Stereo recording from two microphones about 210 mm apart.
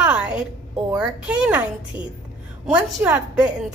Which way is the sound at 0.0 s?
5° right (ahead or behind).